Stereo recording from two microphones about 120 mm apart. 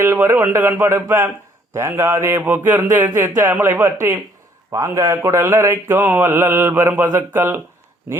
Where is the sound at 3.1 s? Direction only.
15° right (ahead or behind).